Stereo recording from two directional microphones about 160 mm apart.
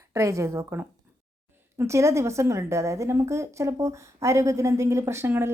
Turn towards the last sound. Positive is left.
turn(degrees=-15)  # may be behind; listen again after turning